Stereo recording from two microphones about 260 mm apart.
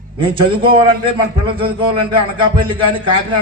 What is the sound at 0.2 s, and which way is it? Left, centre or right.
A man's voice, centre.